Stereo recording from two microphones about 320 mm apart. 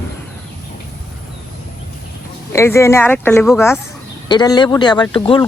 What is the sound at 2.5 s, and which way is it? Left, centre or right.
Speech, centre.